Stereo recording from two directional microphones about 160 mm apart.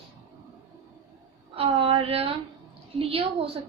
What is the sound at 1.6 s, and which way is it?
A woman's voice, 35° right (ahead or behind).